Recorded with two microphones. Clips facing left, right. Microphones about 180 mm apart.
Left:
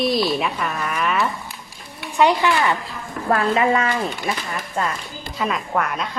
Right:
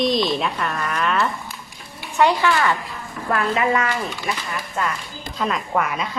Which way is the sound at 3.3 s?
30° left (ahead or behind).